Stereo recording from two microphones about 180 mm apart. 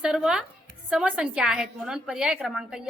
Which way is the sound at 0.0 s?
5° right (ahead or behind).